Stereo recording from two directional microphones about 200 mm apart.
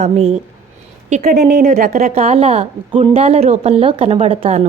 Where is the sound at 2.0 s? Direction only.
30° right (ahead or behind).